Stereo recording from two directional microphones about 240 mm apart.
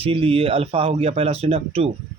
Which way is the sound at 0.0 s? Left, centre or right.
Right.